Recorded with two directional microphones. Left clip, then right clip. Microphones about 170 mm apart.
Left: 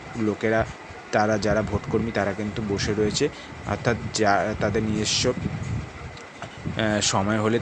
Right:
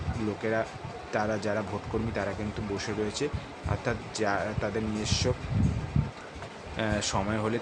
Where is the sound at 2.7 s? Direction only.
25° left (ahead or behind).